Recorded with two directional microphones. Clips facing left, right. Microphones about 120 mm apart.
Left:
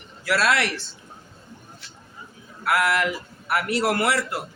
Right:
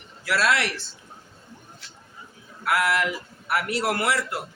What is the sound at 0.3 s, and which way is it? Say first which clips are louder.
Speech: left 1 dB; 60° left (ahead or behind).